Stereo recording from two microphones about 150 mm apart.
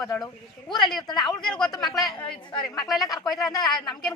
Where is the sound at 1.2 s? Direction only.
5° left (ahead or behind).